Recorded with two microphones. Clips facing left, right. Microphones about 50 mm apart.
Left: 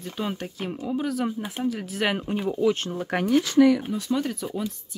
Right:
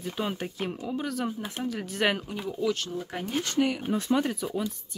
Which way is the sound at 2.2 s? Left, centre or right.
Left.